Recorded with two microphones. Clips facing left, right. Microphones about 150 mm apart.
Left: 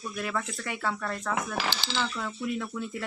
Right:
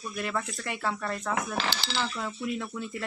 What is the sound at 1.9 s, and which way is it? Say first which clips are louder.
Speech: even; 5° right (ahead or behind).